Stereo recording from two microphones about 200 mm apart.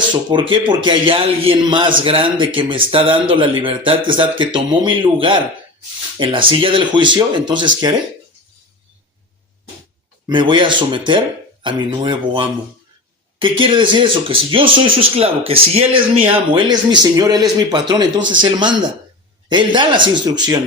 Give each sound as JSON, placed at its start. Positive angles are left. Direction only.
{"t": 0.1, "sound": "a man's voice", "side_deg": -25}
{"t": 10.2, "sound": "a man's voice", "side_deg": -25}